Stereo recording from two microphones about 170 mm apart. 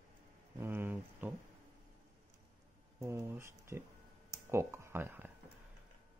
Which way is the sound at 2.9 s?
15° right (ahead or behind).